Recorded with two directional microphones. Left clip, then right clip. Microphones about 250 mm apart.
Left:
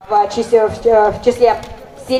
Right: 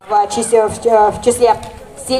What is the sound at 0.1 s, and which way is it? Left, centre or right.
A woman's voice, right.